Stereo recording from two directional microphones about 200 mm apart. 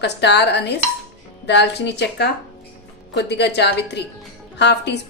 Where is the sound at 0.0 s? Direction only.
60° left (ahead or behind).